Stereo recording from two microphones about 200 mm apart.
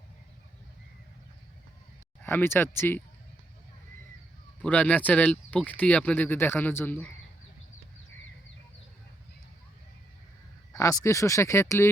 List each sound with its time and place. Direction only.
2.2 s speech: 10° left (ahead or behind)
4.6 s speech: 10° left (ahead or behind)
10.7 s speech: 15° left (ahead or behind)